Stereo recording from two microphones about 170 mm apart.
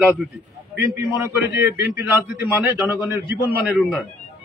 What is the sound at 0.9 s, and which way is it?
A man's voice, 15° right (ahead or behind).